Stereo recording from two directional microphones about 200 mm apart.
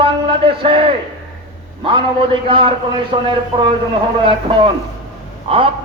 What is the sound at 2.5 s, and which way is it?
Speech, 25° right (ahead or behind).